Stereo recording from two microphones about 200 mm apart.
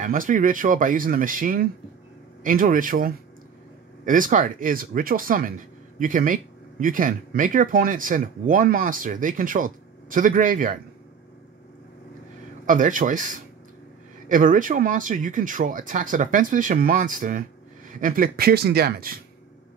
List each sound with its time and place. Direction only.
0.0 s speech: 40° right (ahead or behind)
12.6 s speech: 40° right (ahead or behind)